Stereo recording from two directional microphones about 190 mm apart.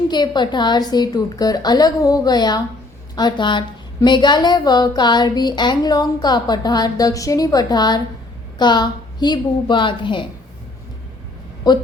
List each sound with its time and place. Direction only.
0.1 s a woman's voice: 25° left (ahead or behind)